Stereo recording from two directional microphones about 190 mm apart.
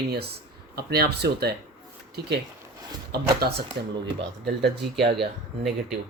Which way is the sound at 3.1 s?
55° right (ahead or behind).